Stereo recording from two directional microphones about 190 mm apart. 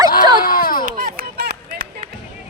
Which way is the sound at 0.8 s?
45° right (ahead or behind).